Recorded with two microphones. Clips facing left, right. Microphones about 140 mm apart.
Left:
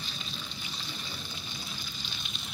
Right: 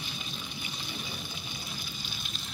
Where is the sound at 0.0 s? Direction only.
10° right (ahead or behind).